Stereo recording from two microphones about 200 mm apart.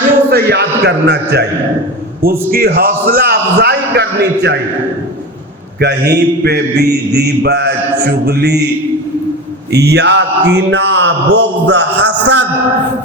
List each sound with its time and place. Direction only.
0.3 s a man's voice: 55° right (ahead or behind)
2.5 s a man's voice: 50° right (ahead or behind)
5.8 s a man's voice: 55° right (ahead or behind)
9.7 s a man's voice: 55° right (ahead or behind)